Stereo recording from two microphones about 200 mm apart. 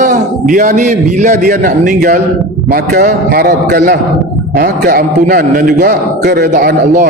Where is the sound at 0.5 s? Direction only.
40° right (ahead or behind).